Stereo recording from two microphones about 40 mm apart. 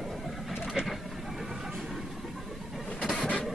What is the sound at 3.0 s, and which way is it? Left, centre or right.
Vehicle, left.